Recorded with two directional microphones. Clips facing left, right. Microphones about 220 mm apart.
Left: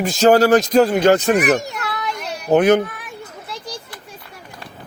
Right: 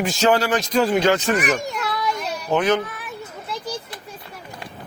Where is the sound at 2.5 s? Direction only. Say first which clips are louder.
Left 6 dB; 60° left (ahead or behind).